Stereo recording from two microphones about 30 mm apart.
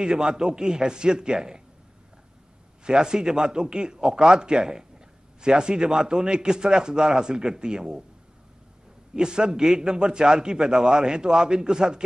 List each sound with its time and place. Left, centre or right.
0.0 s a man's voice: right
2.8 s a man's voice: right
9.1 s a man's voice: right